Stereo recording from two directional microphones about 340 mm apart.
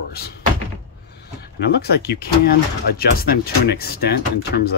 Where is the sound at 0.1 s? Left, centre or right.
Left.